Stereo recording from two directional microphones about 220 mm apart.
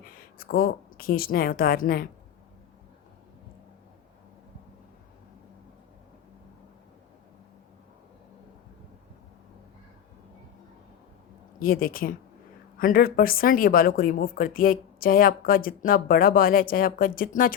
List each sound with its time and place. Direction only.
0.0 s speech: 40° left (ahead or behind)
11.6 s speech: 40° left (ahead or behind)